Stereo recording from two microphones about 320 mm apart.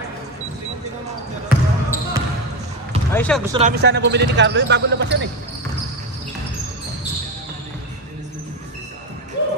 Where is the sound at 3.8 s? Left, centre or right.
Right.